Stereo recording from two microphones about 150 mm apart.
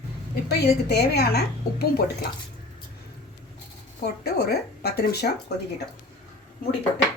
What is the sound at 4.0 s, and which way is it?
A woman's voice, 90° left.